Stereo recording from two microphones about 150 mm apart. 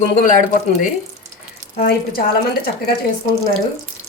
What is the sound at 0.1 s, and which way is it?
Speech, 55° left (ahead or behind).